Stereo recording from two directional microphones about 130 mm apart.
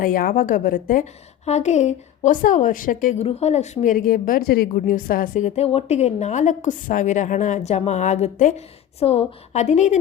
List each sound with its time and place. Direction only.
0.0 s a woman's voice: 90° left
1.5 s a woman's voice: 60° left (ahead or behind); by 3.2 s 85° left
3.2 s a woman's voice: 55° left (ahead or behind)
5.6 s a woman's voice: 55° left (ahead or behind)
9.0 s a woman's voice: 50° left (ahead or behind)